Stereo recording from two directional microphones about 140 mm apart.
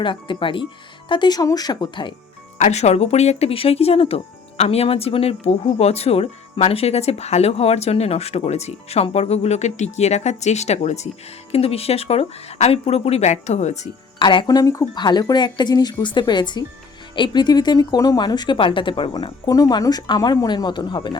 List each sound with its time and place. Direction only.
0.0 s speech: 35° left (ahead or behind)
2.6 s speech: 55° left (ahead or behind)
14.2 s speech: 35° left (ahead or behind)
19.5 s speech: 25° left (ahead or behind)